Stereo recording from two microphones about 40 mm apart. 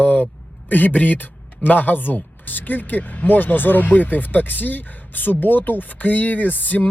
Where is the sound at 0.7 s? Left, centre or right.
Left.